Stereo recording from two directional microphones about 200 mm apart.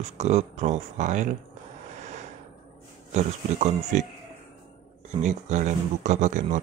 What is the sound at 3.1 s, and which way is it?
Speech, 35° right (ahead or behind).